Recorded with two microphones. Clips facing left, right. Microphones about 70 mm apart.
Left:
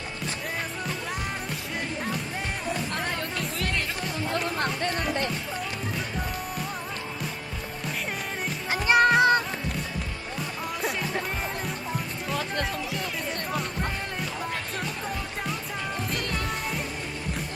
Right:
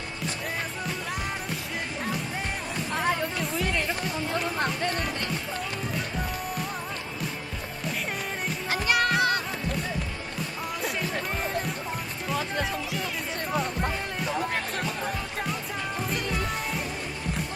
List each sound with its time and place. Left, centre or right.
2.9 s music: centre
8.9 s music: left
12.3 s music: centre
16.0 s music: centre